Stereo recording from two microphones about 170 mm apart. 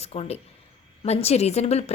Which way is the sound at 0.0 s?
40° left (ahead or behind).